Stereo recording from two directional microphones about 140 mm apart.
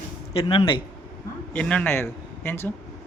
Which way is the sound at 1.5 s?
10° left (ahead or behind).